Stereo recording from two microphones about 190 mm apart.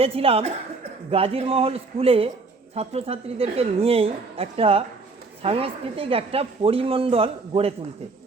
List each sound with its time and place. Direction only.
0.0 s a woman's voice: 30° right (ahead or behind)